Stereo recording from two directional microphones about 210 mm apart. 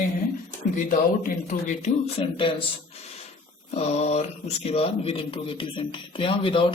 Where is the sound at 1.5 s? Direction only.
35° left (ahead or behind).